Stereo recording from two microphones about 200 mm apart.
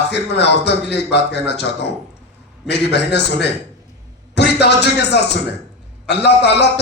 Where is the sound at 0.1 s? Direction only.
60° left (ahead or behind).